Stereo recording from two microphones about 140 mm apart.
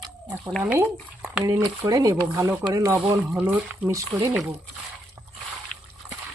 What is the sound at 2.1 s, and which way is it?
Speech, 15° right (ahead or behind).